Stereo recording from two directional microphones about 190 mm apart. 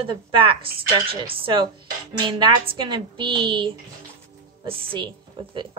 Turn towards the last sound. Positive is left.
turn(degrees=-25)  # may be behind; listen again after turning